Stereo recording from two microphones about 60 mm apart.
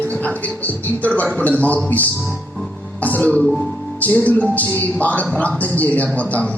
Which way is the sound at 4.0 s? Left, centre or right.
Left.